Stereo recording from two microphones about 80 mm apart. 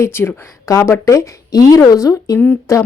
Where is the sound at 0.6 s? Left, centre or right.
Left.